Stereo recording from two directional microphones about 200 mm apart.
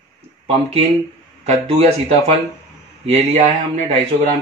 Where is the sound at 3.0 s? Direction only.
30° right (ahead or behind).